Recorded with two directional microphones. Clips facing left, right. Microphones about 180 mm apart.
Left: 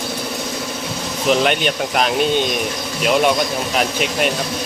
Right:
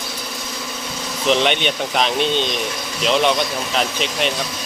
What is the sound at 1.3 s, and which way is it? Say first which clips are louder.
Speech: left 1 dB; 5° left (ahead or behind).